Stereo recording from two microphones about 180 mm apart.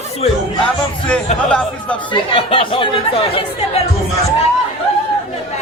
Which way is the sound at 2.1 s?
30° left (ahead or behind).